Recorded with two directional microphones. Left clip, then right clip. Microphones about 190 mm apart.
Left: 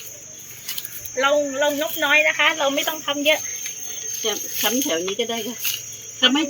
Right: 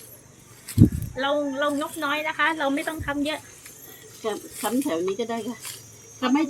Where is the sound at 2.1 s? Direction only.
65° right (ahead or behind).